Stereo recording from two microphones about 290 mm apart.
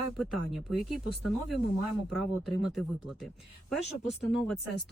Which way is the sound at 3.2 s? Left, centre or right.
Centre.